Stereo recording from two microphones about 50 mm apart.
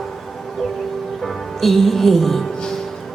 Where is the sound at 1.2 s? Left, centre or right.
Centre.